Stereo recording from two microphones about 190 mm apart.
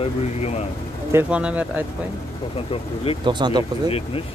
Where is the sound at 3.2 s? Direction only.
25° right (ahead or behind).